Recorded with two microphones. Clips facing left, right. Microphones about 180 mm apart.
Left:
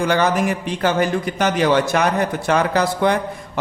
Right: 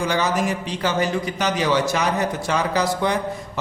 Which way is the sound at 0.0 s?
60° left (ahead or behind).